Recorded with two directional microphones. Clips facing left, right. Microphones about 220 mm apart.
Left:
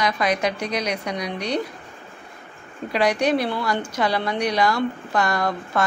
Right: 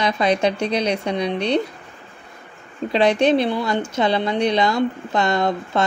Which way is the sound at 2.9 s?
25° right (ahead or behind).